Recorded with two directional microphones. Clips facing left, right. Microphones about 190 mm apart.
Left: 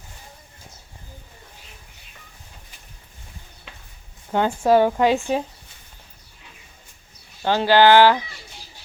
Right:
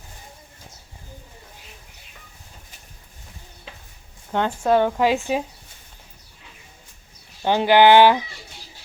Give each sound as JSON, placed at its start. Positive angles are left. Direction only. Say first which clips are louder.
{"t": 4.3, "sound": "speech", "louder": "left 2 dB", "side_deg": 5}
{"t": 7.4, "sound": "speech", "louder": "right 1 dB", "side_deg": -15}